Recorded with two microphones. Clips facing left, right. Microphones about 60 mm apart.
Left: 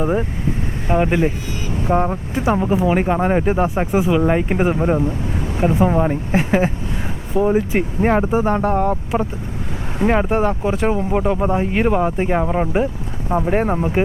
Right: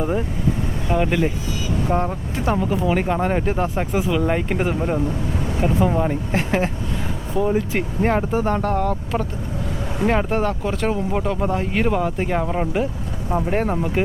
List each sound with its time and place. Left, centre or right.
0.0 s speech: centre